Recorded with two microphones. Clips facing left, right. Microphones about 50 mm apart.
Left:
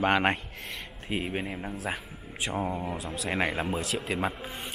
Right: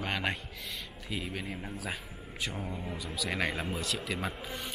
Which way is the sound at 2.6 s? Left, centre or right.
Left.